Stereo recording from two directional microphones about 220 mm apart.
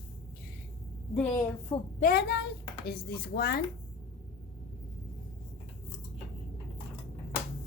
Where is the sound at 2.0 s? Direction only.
45° left (ahead or behind).